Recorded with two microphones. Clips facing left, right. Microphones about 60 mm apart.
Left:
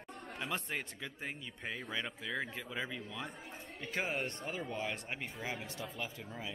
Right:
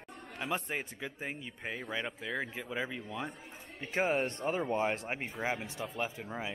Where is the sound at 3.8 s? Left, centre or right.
Right.